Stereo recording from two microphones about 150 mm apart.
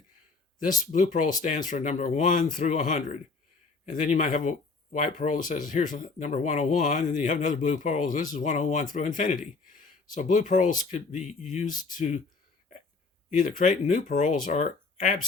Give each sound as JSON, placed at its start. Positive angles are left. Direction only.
{"t": 0.6, "sound": "speech", "side_deg": 60}
{"t": 13.4, "sound": "speech", "side_deg": 60}